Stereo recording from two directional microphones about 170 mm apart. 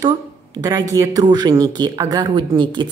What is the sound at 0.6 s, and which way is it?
Speech, 20° right (ahead or behind).